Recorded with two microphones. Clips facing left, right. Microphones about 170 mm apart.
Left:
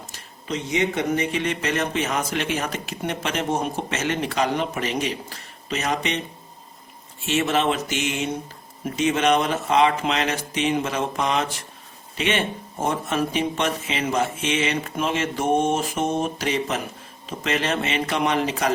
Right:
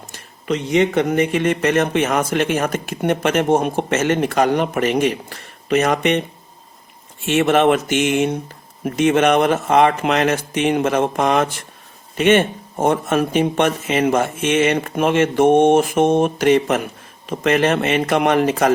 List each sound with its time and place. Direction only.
0.4 s speech: 65° right (ahead or behind)
7.3 s speech: 55° right (ahead or behind)